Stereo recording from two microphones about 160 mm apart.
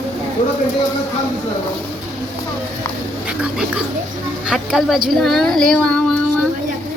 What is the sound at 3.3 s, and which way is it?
Speech, 5° right (ahead or behind).